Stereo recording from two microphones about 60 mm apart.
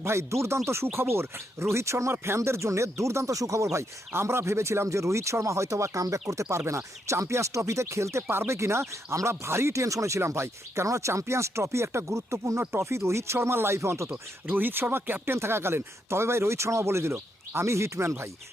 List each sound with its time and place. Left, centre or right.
0.0 s speech: right
4.1 s speech: right
10.2 s speech: right
14.4 s speech: right